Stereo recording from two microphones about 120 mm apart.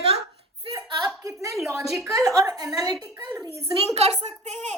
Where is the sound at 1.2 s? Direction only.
25° right (ahead or behind).